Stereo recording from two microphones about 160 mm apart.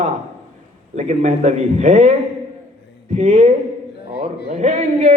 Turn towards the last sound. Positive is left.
turn(degrees=-45)  # may be behind; listen again after turning